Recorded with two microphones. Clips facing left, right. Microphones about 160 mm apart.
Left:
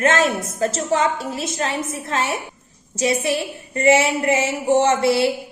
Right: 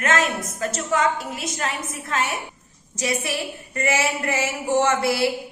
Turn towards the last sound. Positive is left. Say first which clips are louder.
# left 4 dB
turn(degrees=25)  # may be behind; listen again after turning